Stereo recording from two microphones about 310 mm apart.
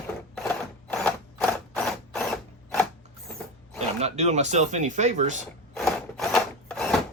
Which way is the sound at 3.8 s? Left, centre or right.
Right.